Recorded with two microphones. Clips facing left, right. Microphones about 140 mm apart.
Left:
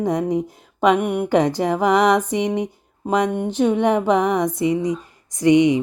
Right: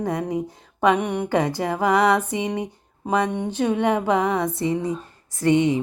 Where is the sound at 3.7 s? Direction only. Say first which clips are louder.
Left 2 dB; 15° left (ahead or behind).